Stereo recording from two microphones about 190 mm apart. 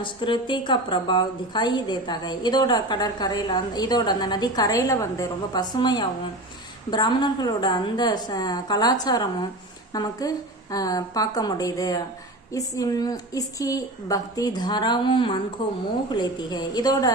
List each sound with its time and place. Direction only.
0.0 s a woman's voice: 25° left (ahead or behind)